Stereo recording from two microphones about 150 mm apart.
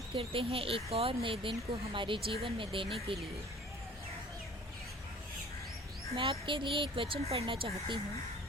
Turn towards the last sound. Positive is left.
turn(degrees=-35)  # may be behind; listen again after turning